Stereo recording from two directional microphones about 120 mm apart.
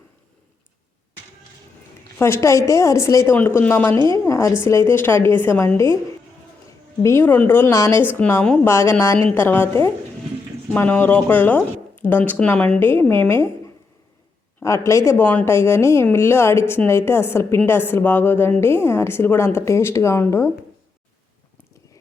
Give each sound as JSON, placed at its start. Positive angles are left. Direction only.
{"t": 2.1, "sound": "a woman's voice", "side_deg": 20}
{"t": 3.3, "sound": "speech", "side_deg": 15}
{"t": 4.0, "sound": "a woman's voice", "side_deg": 25}
{"t": 7.0, "sound": "a woman's voice", "side_deg": 20}
{"t": 8.6, "sound": "a woman's voice", "side_deg": 20}
{"t": 14.6, "sound": "a woman's voice", "side_deg": 25}
{"t": 15.1, "sound": "a woman's voice", "side_deg": 10}